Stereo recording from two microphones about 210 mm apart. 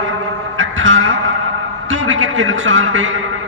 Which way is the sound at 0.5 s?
65° right (ahead or behind).